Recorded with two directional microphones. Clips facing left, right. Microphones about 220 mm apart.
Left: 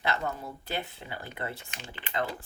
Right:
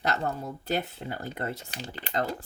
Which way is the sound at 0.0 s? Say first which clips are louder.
Right 2 dB; 45° right (ahead or behind).